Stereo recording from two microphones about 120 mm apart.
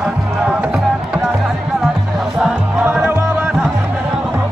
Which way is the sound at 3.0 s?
15° right (ahead or behind).